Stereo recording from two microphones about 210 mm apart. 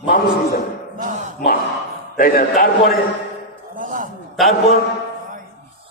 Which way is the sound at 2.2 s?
45° left (ahead or behind).